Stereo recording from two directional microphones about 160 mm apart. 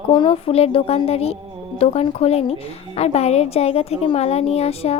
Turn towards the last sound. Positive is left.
turn(degrees=40)  # may be behind; listen again after turning